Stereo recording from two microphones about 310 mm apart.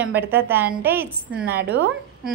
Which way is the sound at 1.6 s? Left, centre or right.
Right.